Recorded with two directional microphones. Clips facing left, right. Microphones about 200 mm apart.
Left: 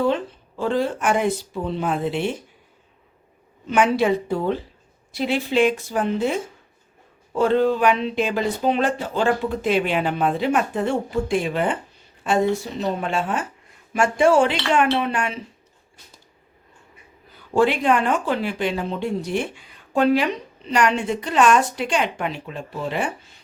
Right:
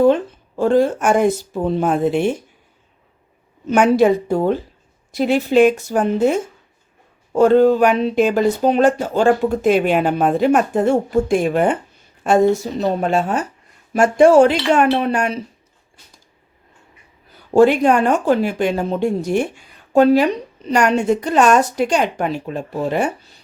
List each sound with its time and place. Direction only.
0.0 s speech: 45° right (ahead or behind)
3.7 s a woman's voice: 45° right (ahead or behind)
17.5 s speech: 45° right (ahead or behind)